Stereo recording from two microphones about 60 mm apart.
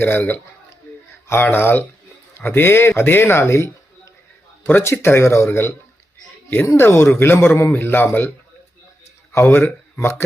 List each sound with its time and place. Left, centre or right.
0.0 s a man's voice: left
0.9 s a sound: left
1.3 s a man's voice: left
6.7 s a man's voice: left
9.3 s a man's voice: left